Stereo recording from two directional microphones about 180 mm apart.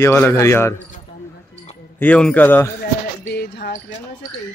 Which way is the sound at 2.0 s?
5° left (ahead or behind).